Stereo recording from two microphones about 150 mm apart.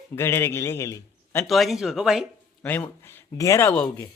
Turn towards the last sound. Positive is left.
turn(degrees=20)  # may be behind; listen again after turning